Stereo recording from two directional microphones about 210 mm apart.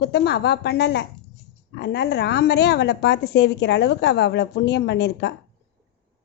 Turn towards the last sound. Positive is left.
turn(degrees=55)  # may be behind; listen again after turning